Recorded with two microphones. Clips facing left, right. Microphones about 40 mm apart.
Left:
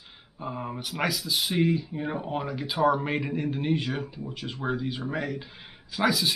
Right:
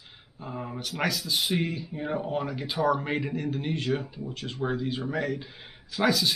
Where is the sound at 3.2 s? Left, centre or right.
Centre.